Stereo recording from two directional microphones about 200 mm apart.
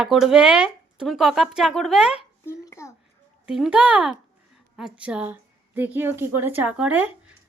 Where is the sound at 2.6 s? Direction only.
15° left (ahead or behind).